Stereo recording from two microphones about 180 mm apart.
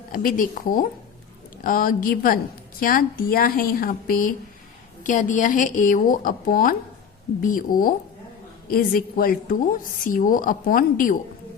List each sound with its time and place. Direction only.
0.1 s a woman's voice: 50° left (ahead or behind)